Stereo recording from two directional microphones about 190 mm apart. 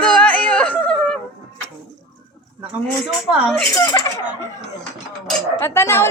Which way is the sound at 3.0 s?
5° left (ahead or behind).